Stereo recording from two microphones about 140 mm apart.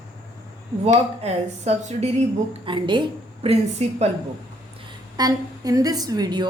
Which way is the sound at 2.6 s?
35° right (ahead or behind).